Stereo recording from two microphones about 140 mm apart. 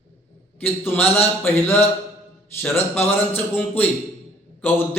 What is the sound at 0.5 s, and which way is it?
A man's voice, 15° left (ahead or behind).